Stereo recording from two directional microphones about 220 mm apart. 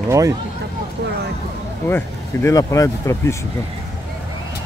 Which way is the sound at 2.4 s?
15° left (ahead or behind).